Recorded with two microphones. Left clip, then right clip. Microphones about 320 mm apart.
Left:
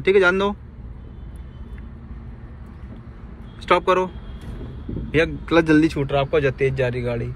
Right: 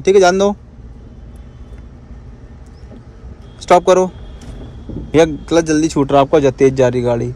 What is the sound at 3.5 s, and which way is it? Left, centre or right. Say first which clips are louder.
Speech: right 8 dB; centre.